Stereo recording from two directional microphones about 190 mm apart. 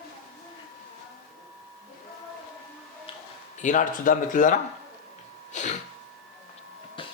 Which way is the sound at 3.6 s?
45° left (ahead or behind).